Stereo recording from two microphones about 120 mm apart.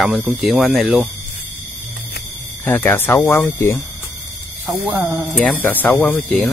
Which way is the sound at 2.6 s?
20° left (ahead or behind).